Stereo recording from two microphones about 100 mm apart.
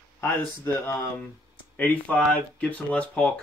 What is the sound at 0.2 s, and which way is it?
Speech, 25° left (ahead or behind).